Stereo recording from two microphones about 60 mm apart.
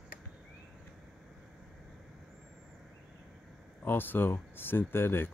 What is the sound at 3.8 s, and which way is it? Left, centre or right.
Speech, left.